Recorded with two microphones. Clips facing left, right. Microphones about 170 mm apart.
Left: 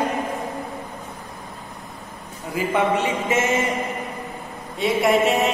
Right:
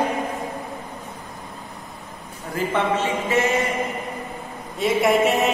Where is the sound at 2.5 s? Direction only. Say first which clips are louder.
Left 1 dB; 15° left (ahead or behind).